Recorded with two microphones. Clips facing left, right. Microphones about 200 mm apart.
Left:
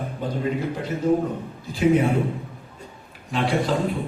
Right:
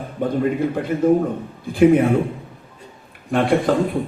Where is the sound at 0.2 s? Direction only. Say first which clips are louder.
Right 7 dB; 60° right (ahead or behind).